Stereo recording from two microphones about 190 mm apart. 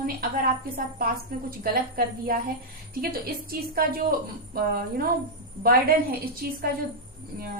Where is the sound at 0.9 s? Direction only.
50° right (ahead or behind).